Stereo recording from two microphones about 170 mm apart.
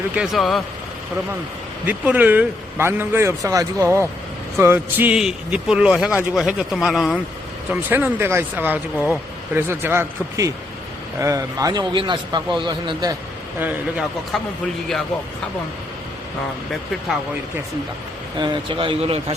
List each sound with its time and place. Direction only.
0.2 s a man's voice: centre (ahead or behind)
1.9 s a man's voice: 10° right (ahead or behind)
7.7 s a man's voice: 10° right (ahead or behind)
14.3 s a man's voice: 5° left (ahead or behind)
18.3 s a man's voice: 25° right (ahead or behind)